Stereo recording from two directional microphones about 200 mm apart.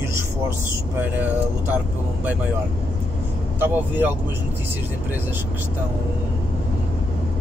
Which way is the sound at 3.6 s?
10° right (ahead or behind).